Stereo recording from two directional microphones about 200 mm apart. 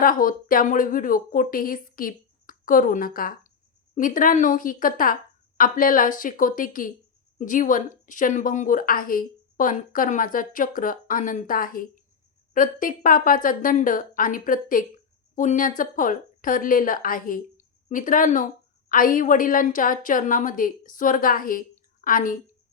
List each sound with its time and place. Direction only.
0.0 s a woman's voice: 45° left (ahead or behind)